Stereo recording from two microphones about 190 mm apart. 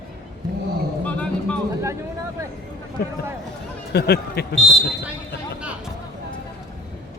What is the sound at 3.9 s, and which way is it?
Speech, 55° left (ahead or behind).